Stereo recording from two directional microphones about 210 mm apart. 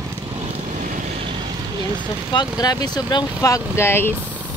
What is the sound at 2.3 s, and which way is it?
Speech, 20° left (ahead or behind).